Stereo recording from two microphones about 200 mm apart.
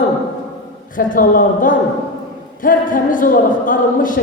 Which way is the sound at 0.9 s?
45° left (ahead or behind).